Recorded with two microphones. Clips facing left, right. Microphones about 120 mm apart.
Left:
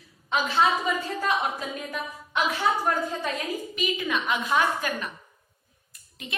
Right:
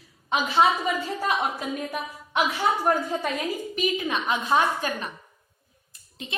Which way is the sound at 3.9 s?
30° right (ahead or behind).